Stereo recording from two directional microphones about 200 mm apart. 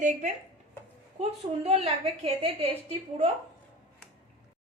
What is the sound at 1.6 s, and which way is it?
Speech, 30° right (ahead or behind).